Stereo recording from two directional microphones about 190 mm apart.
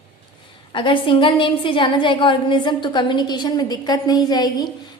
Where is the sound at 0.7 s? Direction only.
25° left (ahead or behind).